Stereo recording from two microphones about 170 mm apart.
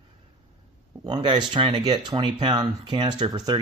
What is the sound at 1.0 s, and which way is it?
Speech, 25° right (ahead or behind).